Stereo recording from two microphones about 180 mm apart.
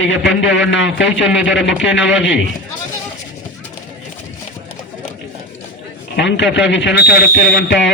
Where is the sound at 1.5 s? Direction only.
90° left.